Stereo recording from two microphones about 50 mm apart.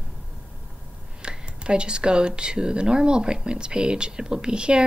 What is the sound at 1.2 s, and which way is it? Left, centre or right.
Speech, centre.